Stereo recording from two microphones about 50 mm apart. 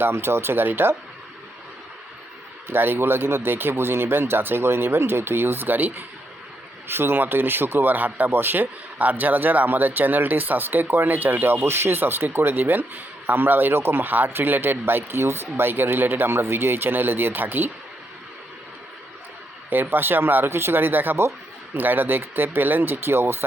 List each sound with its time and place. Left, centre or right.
0.0 s a man's voice: right
2.6 s a man's voice: right
6.8 s a man's voice: right
19.7 s a man's voice: right